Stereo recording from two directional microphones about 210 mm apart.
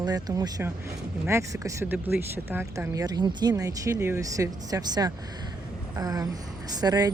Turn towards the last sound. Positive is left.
turn(degrees=-20)  # may be behind; listen again after turning